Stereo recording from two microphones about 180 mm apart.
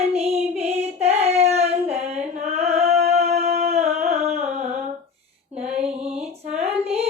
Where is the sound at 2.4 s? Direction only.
35° right (ahead or behind).